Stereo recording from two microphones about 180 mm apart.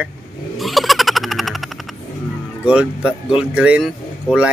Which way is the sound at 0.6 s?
Centre (ahead or behind).